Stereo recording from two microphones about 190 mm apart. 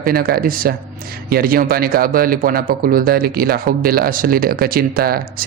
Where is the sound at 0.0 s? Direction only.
50° right (ahead or behind).